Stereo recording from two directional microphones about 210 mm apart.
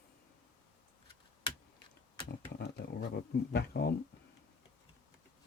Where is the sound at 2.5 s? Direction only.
50° left (ahead or behind).